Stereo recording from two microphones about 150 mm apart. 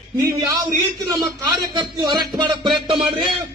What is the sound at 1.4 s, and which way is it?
Music, 30° right (ahead or behind).